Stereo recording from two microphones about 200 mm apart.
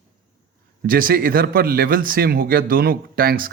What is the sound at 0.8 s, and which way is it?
A man's voice, 45° right (ahead or behind).